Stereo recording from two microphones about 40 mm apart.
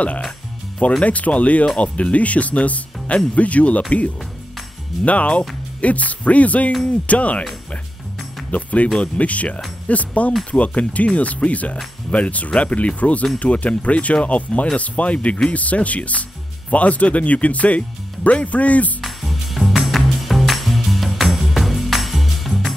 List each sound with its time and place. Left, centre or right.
1.0 s speech: left
5.0 s speech: left
8.5 s speech: left
18.9 s music: centre